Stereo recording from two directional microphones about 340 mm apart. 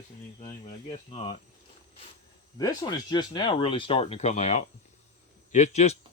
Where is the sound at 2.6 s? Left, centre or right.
Centre.